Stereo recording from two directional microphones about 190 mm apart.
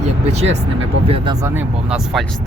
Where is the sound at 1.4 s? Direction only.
10° right (ahead or behind).